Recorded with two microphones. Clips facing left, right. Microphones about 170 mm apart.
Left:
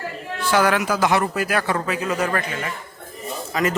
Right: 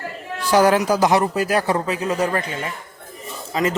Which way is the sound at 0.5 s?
35° right (ahead or behind).